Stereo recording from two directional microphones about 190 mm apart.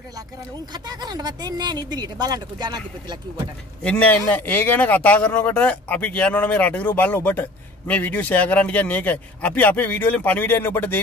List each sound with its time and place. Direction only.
0.7 s speech: 20° right (ahead or behind)
3.8 s a man's voice: 5° left (ahead or behind)